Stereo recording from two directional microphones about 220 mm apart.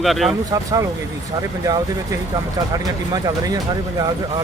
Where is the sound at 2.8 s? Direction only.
15° right (ahead or behind).